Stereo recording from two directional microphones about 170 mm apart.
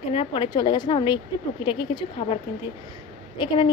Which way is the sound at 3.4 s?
25° left (ahead or behind).